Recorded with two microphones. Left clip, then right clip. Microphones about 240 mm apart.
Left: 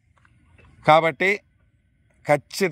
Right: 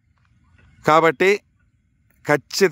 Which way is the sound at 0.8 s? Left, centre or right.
Centre.